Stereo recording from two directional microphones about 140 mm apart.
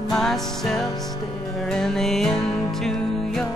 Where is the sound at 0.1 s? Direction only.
Centre (ahead or behind).